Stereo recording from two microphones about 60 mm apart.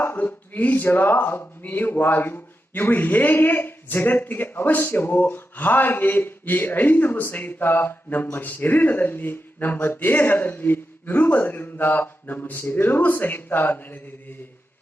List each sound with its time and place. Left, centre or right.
0.0 s speech: left